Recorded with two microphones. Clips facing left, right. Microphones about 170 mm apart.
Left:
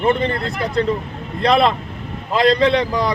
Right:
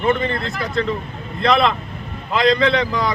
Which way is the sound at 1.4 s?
35° left (ahead or behind).